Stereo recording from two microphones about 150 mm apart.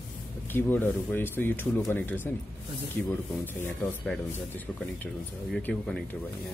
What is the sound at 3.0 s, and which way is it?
Speech, 5° left (ahead or behind).